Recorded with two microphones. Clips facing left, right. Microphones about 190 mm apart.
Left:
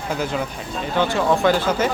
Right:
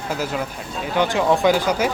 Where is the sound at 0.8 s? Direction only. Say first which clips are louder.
Right 1 dB; 15° right (ahead or behind).